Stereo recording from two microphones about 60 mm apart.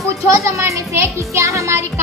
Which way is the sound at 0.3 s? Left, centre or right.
Right.